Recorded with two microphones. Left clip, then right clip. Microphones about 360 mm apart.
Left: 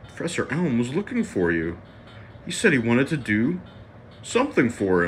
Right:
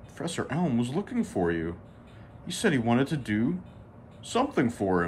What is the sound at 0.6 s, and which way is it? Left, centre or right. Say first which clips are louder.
Speech: left 4 dB; right.